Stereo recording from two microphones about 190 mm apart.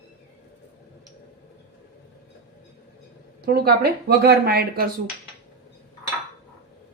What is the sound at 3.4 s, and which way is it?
Speech, 55° right (ahead or behind).